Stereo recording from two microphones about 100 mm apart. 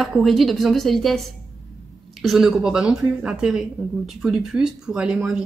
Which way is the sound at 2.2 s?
5° right (ahead or behind).